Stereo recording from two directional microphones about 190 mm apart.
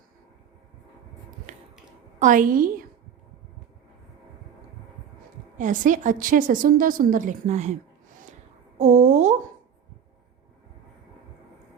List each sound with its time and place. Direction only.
2.1 s a woman's voice: 45° right (ahead or behind)
5.5 s a woman's voice: 40° right (ahead or behind)
8.8 s a sound: 35° right (ahead or behind)